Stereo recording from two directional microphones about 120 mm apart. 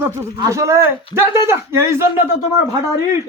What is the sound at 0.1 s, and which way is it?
Speech, 25° right (ahead or behind).